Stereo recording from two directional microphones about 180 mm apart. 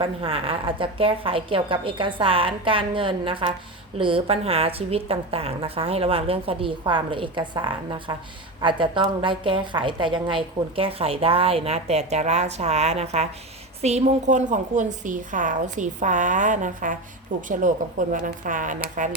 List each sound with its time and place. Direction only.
0.0 s a woman's voice: 30° right (ahead or behind); by 18.8 s 45° right (ahead or behind)